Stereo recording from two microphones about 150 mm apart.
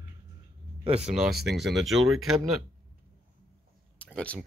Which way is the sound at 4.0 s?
10° left (ahead or behind).